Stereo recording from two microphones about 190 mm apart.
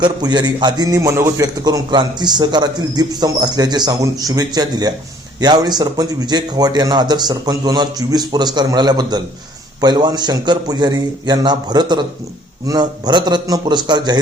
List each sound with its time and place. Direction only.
0.0 s a man's voice: 20° right (ahead or behind)